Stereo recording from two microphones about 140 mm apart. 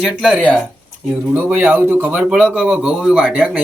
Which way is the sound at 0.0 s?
5° right (ahead or behind).